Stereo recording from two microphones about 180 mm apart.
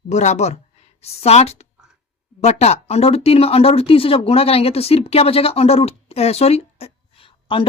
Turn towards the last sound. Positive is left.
turn(degrees=30)  # may be behind; listen again after turning